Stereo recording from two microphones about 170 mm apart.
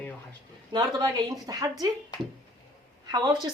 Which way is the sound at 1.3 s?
25° right (ahead or behind).